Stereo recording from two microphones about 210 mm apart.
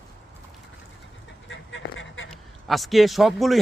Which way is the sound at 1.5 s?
65° left (ahead or behind).